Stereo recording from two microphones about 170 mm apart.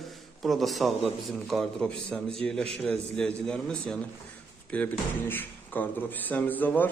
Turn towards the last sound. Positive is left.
turn(degrees=10)  # may be behind; listen again after turning